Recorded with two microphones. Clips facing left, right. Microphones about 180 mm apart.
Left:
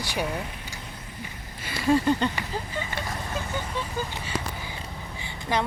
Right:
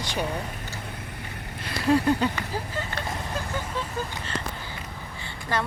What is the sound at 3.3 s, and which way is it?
Vehicle, centre (ahead or behind).